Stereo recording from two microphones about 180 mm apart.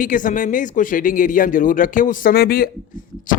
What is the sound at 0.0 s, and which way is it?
A man's voice, 45° left (ahead or behind).